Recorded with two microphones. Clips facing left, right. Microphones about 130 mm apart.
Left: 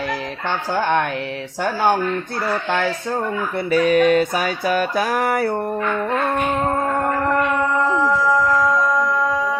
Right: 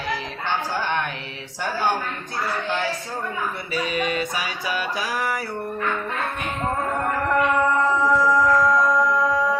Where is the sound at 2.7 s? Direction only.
55° left (ahead or behind).